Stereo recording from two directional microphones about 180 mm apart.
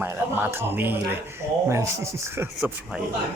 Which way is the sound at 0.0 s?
10° right (ahead or behind).